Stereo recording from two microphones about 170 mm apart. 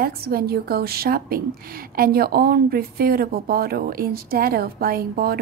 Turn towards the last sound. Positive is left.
turn(degrees=-60)  # may be behind; listen again after turning